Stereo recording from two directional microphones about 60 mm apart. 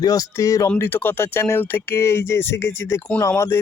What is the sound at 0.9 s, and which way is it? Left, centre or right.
Speech, left.